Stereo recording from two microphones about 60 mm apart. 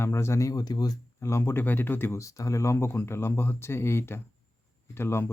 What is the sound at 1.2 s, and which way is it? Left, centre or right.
Speech, left.